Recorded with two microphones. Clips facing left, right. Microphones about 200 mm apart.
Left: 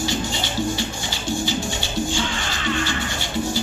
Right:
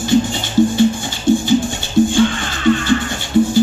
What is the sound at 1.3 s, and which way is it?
Music, 55° right (ahead or behind).